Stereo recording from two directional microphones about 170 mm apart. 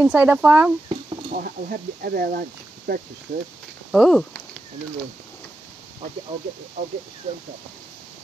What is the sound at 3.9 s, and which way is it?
Speech, centre (ahead or behind).